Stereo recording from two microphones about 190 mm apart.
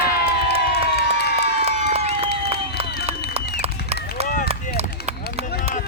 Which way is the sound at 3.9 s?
55° left (ahead or behind).